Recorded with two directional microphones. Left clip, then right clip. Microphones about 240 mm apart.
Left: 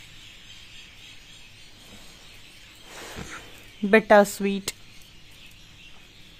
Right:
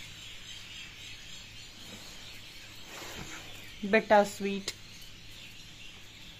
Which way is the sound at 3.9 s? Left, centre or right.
Left.